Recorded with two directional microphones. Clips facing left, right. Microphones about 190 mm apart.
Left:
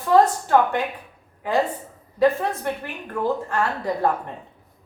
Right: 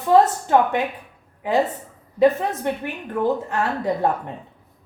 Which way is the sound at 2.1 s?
20° right (ahead or behind).